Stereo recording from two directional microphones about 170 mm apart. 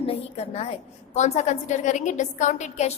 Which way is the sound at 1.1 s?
45° left (ahead or behind).